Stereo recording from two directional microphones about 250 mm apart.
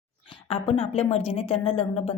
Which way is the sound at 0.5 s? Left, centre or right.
Left.